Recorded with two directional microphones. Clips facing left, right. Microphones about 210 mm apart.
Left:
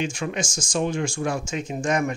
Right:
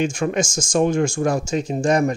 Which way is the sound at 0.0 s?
45° right (ahead or behind).